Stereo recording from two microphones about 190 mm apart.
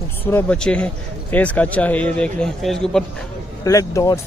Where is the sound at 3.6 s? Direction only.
15° left (ahead or behind).